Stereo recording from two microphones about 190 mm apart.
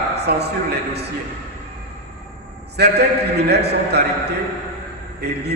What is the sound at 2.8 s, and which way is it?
A man's voice, 60° right (ahead or behind).